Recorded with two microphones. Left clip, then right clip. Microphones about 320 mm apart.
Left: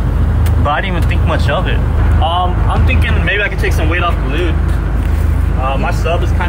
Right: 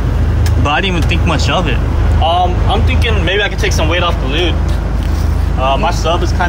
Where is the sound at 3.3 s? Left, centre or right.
Right.